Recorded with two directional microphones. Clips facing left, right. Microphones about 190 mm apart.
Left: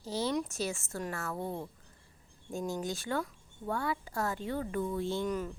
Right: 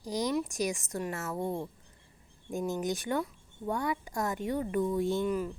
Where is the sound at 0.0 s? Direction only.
15° right (ahead or behind).